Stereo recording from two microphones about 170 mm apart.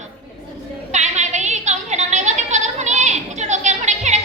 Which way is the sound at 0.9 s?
45° right (ahead or behind).